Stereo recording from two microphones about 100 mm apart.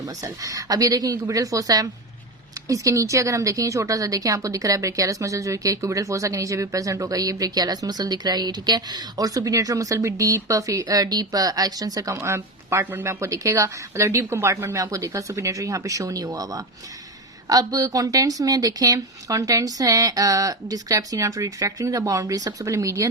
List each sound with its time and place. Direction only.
0.0 s a woman's voice: 35° right (ahead or behind)